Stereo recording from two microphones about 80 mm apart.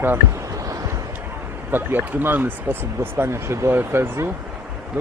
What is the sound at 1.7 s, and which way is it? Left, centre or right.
Speech, right.